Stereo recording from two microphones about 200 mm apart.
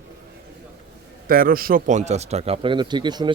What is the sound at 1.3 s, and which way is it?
Speech, 45° right (ahead or behind).